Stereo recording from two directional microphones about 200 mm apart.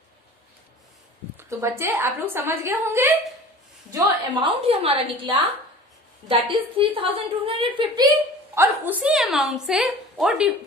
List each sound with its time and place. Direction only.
1.3 s a woman's voice: 15° right (ahead or behind)
4.4 s a woman's voice: 30° right (ahead or behind); by 10.5 s 5° right (ahead or behind)